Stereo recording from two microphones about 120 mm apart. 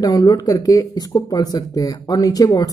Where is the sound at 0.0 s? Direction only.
30° left (ahead or behind).